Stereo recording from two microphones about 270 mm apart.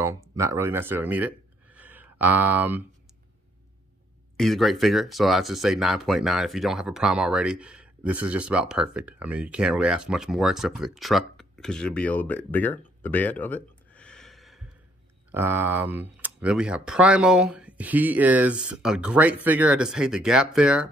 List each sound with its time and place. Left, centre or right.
0.0 s speech: centre
4.4 s speech: centre